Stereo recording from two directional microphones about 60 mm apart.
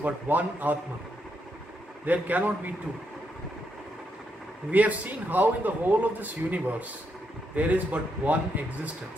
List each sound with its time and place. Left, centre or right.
0.0 s a man's voice: right
2.0 s a man's voice: right
4.6 s a man's voice: right